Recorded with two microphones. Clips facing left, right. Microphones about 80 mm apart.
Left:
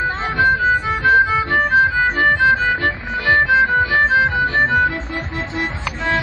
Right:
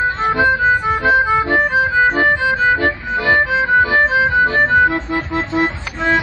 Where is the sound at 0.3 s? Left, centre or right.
Right.